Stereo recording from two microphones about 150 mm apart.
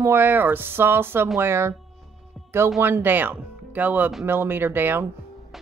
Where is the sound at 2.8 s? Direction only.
15° right (ahead or behind).